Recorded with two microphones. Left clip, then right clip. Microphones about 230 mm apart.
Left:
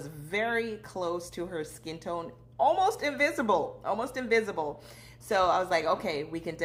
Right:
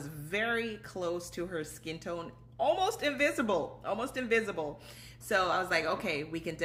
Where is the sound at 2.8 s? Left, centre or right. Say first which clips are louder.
Left 3 dB; centre.